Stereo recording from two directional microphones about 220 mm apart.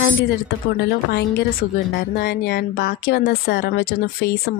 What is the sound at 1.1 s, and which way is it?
A woman's voice, 50° left (ahead or behind).